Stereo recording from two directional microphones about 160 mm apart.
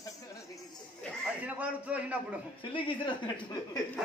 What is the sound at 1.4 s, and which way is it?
Speech, 10° right (ahead or behind).